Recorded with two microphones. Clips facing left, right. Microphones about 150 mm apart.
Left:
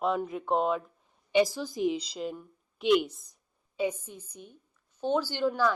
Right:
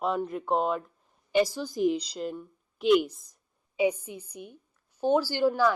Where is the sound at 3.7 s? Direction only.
10° right (ahead or behind).